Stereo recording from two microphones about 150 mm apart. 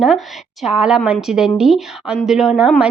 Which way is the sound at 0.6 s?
5° right (ahead or behind).